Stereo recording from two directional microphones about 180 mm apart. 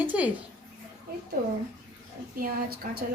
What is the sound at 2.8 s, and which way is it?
Speech, 50° right (ahead or behind).